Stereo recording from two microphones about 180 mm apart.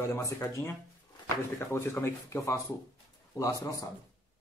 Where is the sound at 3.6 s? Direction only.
20° left (ahead or behind).